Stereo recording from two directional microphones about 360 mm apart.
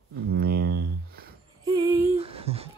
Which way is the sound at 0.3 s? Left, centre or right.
Right.